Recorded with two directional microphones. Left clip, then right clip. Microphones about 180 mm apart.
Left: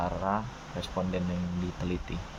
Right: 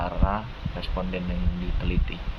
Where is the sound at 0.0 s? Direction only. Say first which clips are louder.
Right 2 dB; 5° left (ahead or behind).